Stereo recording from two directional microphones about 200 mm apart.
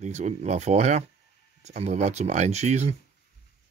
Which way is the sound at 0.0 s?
35° right (ahead or behind).